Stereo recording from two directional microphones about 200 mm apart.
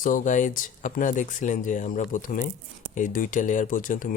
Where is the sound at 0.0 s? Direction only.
40° left (ahead or behind).